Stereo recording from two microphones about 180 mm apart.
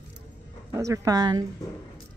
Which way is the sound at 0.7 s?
20° right (ahead or behind).